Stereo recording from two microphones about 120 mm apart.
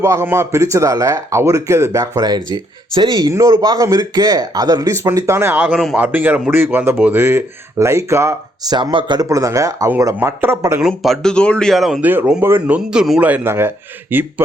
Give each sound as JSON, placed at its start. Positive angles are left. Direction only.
{"t": 0.0, "sound": "speech", "side_deg": -25}
{"t": 5.7, "sound": "speech", "side_deg": 0}
{"t": 6.0, "sound": "a man's voice", "side_deg": -15}
{"t": 8.7, "sound": "speech", "side_deg": -45}
{"t": 9.3, "sound": "speech", "side_deg": -25}
{"t": 10.8, "sound": "speech", "side_deg": -5}
{"t": 12.0, "sound": "a man's voice", "side_deg": -10}